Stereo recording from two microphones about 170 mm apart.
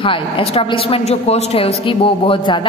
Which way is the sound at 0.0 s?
30° left (ahead or behind).